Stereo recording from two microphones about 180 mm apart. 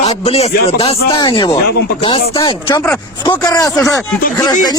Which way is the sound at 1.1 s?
25° left (ahead or behind).